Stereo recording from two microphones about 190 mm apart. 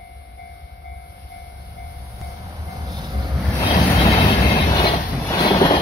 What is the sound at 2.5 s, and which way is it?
Train, 20° right (ahead or behind).